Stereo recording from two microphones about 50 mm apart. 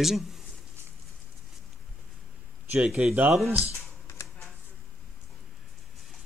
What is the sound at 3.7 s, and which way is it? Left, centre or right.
Computer keyboard, left.